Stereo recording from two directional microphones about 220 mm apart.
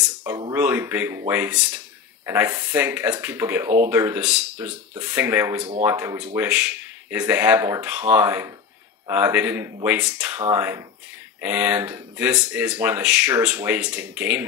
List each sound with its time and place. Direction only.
0.5 s speech: 10° right (ahead or behind)
5.6 s speech: 25° right (ahead or behind)
5.9 s speech: 10° right (ahead or behind)